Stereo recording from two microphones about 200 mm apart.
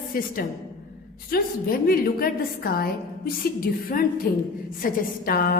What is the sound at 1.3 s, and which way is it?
A woman's voice, 50° left (ahead or behind).